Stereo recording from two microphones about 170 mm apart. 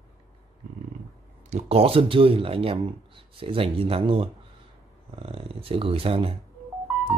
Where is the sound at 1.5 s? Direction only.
35° right (ahead or behind).